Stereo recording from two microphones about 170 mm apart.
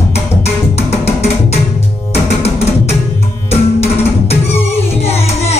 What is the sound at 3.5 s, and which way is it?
Music, 35° left (ahead or behind).